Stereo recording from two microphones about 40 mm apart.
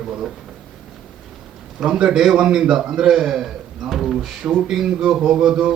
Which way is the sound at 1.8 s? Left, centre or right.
Right.